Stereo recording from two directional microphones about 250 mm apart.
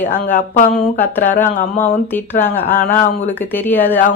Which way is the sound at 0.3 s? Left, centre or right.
Left.